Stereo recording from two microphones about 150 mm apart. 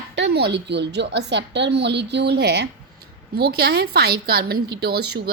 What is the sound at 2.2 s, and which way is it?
Speech, 90° right.